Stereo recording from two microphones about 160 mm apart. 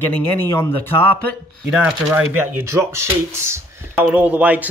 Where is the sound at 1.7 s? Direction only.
10° right (ahead or behind).